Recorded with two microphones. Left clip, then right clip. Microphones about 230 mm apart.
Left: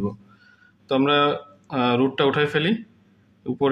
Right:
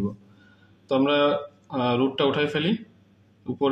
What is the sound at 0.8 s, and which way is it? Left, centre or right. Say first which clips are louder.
Speech: left 2 dB; left.